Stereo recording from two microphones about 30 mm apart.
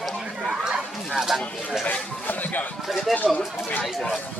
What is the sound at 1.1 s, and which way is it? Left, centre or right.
Speech, centre.